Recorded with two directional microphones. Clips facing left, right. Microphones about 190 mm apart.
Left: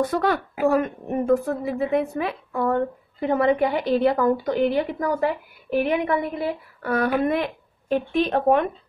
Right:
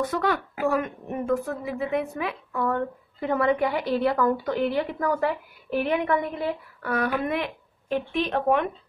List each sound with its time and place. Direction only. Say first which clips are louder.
0.0 s a woman's voice: left 3 dB; 35° left (ahead or behind)
3.2 s a woman's voice: left 3 dB; 20° left (ahead or behind)
6.8 s a woman's voice: left 5 dB; 30° left (ahead or behind)